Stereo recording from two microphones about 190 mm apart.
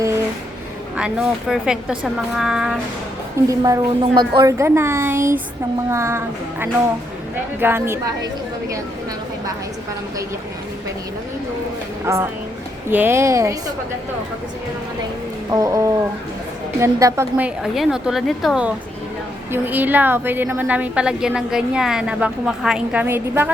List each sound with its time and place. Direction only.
0.9 s a woman's voice: 5° right (ahead or behind)
3.5 s a woman's voice: 20° right (ahead or behind)
12.0 s a woman's voice: 15° right (ahead or behind)
15.4 s a woman's voice: 20° right (ahead or behind)